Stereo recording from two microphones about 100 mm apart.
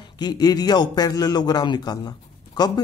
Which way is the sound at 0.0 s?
45° left (ahead or behind).